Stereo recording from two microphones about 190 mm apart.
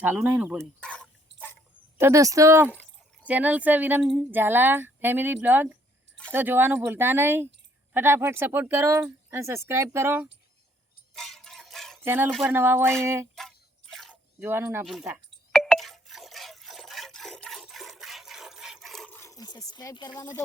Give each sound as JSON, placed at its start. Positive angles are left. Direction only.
{"t": 0.0, "sound": "speech", "side_deg": -10}
{"t": 0.8, "sound": "dog", "side_deg": 5}
{"t": 2.0, "sound": "speech", "side_deg": -15}
{"t": 11.1, "sound": "music", "side_deg": 0}
{"t": 12.0, "sound": "speech", "side_deg": -10}
{"t": 13.4, "sound": "a sound", "side_deg": 5}
{"t": 14.3, "sound": "speech", "side_deg": -10}
{"t": 15.5, "sound": "a sound", "side_deg": 5}